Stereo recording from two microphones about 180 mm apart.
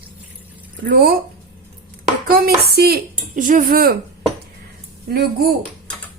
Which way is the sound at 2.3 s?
60° right (ahead or behind).